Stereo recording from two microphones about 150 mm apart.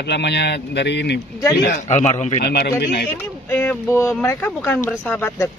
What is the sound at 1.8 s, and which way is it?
Speech, 50° left (ahead or behind).